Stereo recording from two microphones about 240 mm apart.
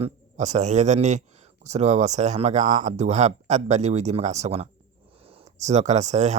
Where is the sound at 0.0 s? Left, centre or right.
Right.